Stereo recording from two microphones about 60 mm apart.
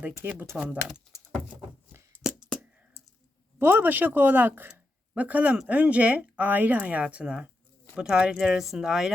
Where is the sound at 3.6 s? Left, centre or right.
Right.